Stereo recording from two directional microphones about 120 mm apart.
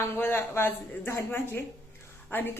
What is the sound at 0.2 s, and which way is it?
A woman's voice, 20° left (ahead or behind).